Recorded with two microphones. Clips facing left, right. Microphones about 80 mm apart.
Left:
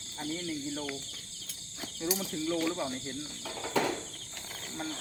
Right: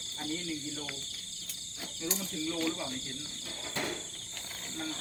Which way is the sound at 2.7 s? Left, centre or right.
Left.